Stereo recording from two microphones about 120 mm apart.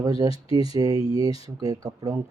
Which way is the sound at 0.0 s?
30° right (ahead or behind).